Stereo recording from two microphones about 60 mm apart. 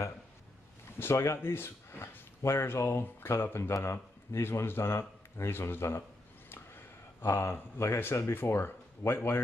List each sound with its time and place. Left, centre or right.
0.9 s a man's voice: left
6.5 s a sound: left
7.8 s a man's voice: left